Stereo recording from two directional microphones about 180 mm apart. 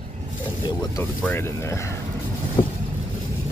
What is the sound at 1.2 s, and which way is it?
Speech, 10° left (ahead or behind).